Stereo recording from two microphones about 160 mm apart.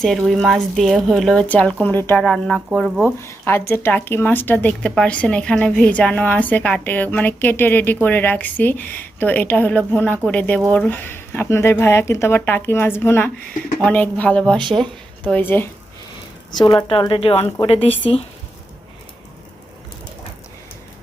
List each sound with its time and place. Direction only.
0.0 s speech: centre (ahead or behind)
2.2 s speech: centre (ahead or behind)
3.2 s speech: 15° left (ahead or behind)
14.6 s speech: 30° right (ahead or behind)
15.2 s speech: 10° left (ahead or behind)
16.6 s a woman's voice: 30° left (ahead or behind)